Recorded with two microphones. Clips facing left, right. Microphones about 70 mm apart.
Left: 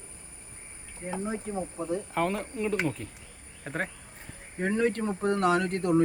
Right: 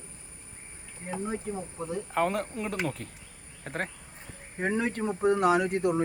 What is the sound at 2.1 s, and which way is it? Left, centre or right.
Speech, centre.